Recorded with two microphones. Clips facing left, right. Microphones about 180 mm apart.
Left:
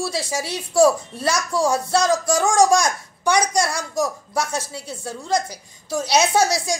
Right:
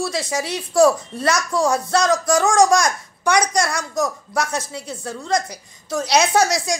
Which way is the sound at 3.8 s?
30° left (ahead or behind).